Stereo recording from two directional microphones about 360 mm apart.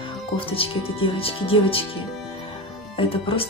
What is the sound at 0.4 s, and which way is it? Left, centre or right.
Speech, centre.